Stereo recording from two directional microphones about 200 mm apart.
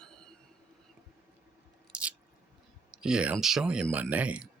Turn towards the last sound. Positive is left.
turn(degrees=-5)  # may be behind; listen again after turning